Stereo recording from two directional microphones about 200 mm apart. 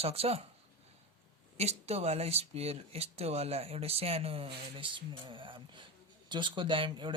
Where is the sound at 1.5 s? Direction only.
30° right (ahead or behind).